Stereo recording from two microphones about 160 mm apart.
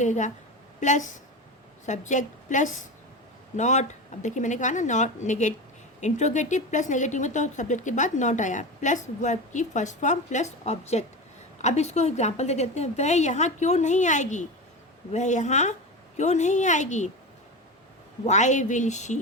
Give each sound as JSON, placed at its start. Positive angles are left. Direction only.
{"t": 0.0, "sound": "speech", "side_deg": 50}
{"t": 18.3, "sound": "speech", "side_deg": 50}